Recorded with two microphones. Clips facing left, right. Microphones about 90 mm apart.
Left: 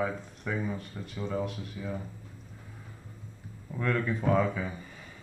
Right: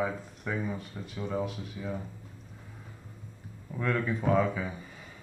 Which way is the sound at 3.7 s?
5° right (ahead or behind).